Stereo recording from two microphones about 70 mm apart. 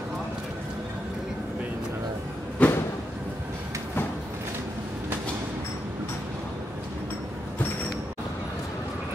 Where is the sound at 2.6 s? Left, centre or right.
Left.